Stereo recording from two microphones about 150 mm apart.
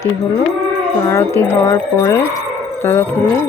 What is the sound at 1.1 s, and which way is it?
Speech, 20° left (ahead or behind).